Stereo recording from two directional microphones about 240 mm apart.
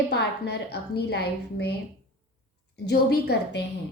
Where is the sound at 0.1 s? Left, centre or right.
Left.